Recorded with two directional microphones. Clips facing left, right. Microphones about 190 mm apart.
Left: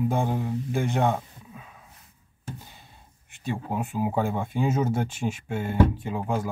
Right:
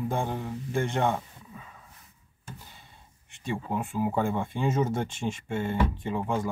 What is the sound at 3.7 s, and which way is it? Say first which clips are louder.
Speech: left 1 dB; 10° left (ahead or behind).